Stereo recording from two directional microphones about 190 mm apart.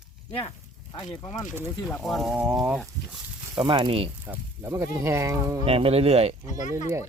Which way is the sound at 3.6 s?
25° right (ahead or behind).